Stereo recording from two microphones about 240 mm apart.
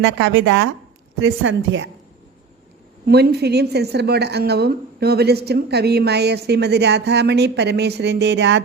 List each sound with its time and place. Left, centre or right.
0.0 s a woman's voice: right
3.1 s a woman's voice: right